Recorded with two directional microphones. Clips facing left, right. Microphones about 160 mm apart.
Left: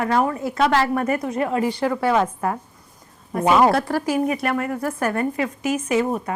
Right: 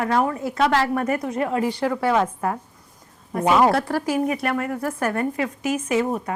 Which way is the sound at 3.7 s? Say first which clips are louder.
Left 1 dB; 10° left (ahead or behind).